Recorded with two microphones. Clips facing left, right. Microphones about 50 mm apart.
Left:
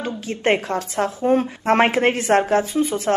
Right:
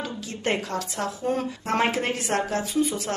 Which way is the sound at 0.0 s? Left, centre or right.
Left.